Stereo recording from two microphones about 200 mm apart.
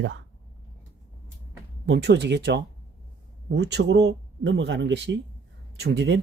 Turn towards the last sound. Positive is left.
turn(degrees=-55)  # may be behind; listen again after turning